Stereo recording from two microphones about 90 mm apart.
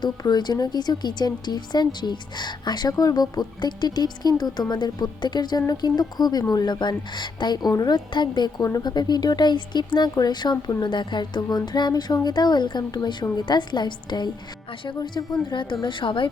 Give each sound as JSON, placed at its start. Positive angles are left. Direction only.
{"t": 0.0, "sound": "speech", "side_deg": 50}